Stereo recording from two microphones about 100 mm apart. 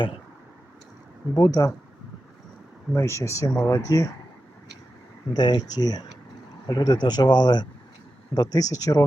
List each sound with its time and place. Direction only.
1.4 s speech: 35° left (ahead or behind)
2.9 s speech: 25° left (ahead or behind)
5.3 s speech: 40° left (ahead or behind)